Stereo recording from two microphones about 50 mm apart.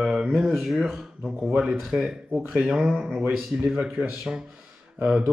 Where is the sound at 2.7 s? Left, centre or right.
Centre.